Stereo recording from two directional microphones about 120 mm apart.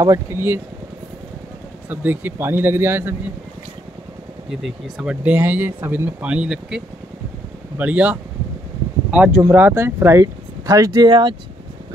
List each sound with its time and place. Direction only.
0.0 s speech: 25° right (ahead or behind)
1.9 s speech: 15° right (ahead or behind)
4.6 s speech: 5° right (ahead or behind)
9.5 s speech: 15° right (ahead or behind); by 11.3 s 40° right (ahead or behind)